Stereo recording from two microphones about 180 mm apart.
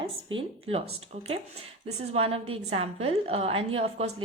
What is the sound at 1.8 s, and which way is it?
A woman's voice, 35° right (ahead or behind).